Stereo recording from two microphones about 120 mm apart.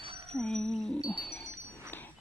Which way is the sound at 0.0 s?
50° right (ahead or behind).